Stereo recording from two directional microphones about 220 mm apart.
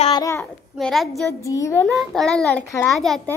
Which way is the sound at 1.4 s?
15° left (ahead or behind).